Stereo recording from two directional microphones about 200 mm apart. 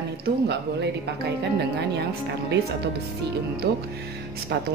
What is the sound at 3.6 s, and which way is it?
Speech, 55° right (ahead or behind).